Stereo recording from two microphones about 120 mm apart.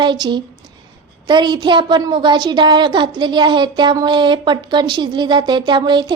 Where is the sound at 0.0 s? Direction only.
40° right (ahead or behind).